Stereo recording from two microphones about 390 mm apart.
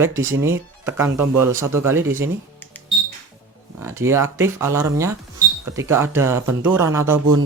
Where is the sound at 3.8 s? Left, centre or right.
Centre.